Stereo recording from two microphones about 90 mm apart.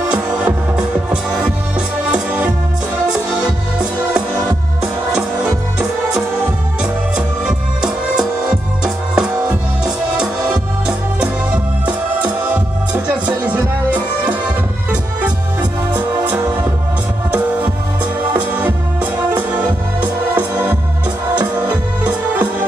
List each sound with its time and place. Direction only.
0.1 s music: 10° right (ahead or behind)
6.8 s music: 10° right (ahead or behind)
15.9 s music: 20° right (ahead or behind)